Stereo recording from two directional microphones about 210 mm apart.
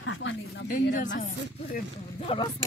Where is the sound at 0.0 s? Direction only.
60° left (ahead or behind).